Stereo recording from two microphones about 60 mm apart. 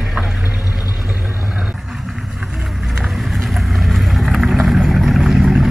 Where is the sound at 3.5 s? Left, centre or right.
Centre.